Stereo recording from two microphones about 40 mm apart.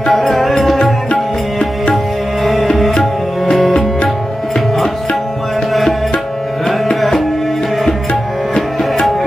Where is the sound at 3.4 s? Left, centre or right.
Centre.